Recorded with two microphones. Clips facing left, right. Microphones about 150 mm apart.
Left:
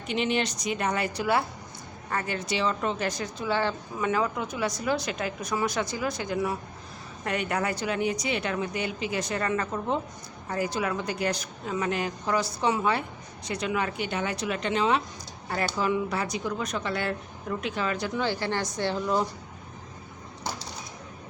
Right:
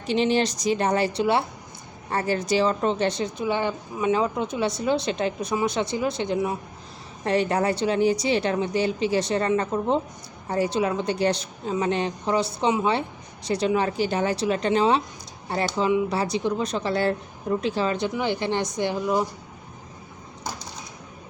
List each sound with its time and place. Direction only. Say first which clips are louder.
0.1 s a woman's voice: right 6 dB; 30° right (ahead or behind)
16.1 s a woman's voice: right 5 dB; 30° right (ahead or behind)
18.1 s speech: right 3 dB; 15° right (ahead or behind)